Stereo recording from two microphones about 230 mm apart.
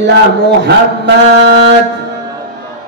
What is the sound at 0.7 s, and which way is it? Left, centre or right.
A man's voice, right.